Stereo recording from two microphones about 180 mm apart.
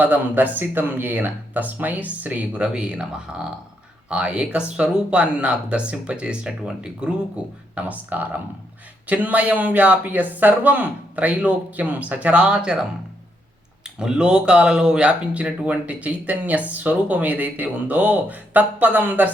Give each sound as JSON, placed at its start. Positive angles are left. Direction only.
{"t": 0.0, "sound": "speech", "side_deg": -10}
{"t": 13.8, "sound": "speech", "side_deg": -5}